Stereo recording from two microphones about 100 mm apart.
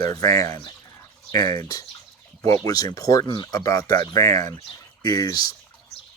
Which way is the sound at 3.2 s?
50° left (ahead or behind).